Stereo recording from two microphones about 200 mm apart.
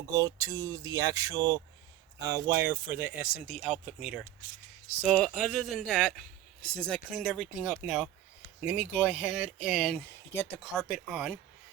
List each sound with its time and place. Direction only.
0.0 s speech: 15° right (ahead or behind)